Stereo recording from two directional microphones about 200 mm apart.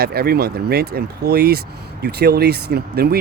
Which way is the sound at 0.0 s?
50° right (ahead or behind).